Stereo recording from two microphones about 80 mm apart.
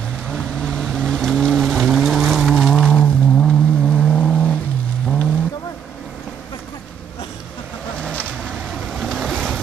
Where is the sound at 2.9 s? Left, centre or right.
Centre.